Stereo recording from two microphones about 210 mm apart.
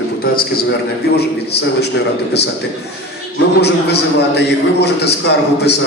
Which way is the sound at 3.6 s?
55° left (ahead or behind).